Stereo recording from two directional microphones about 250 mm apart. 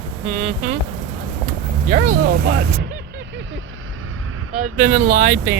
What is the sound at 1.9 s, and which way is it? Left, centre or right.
Speech, right.